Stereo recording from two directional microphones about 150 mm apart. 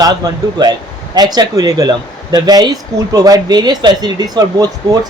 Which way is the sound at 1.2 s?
25° right (ahead or behind).